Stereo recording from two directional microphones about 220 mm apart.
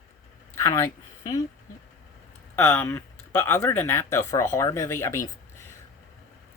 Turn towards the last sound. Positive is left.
turn(degrees=10)  # may be behind; listen again after turning